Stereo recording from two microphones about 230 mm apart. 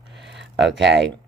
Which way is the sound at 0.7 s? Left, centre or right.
Right.